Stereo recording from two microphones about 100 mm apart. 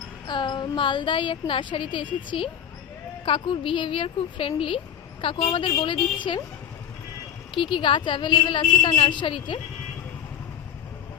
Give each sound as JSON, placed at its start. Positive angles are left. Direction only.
{"t": 0.3, "sound": "a woman's voice", "side_deg": 50}
{"t": 7.5, "sound": "a woman's voice", "side_deg": 55}